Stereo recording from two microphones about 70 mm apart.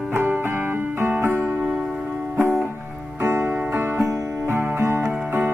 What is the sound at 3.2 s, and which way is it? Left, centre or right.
Music, right.